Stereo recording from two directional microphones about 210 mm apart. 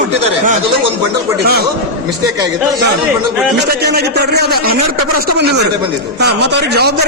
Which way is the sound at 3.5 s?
50° right (ahead or behind).